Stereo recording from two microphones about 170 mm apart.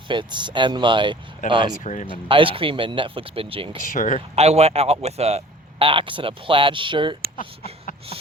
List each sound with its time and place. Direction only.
0.1 s speech: 30° right (ahead or behind)
1.8 s speech: 45° left (ahead or behind)
2.0 s speech: 30° right (ahead or behind)
3.8 s speech: 50° left (ahead or behind)
4.4 s speech: 40° right (ahead or behind)